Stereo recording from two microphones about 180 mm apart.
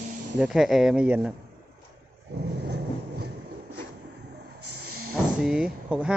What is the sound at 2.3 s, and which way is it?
Vehicle, 70° right (ahead or behind).